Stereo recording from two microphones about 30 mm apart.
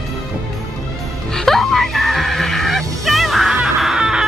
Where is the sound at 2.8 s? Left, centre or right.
Centre.